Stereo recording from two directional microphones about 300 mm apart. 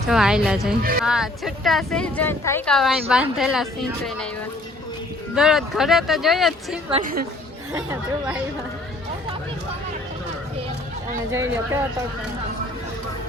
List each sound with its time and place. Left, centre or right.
0.1 s speech: centre
5.3 s speech: centre
6.9 s a woman's voice: right
7.7 s speech: centre
11.3 s speech: centre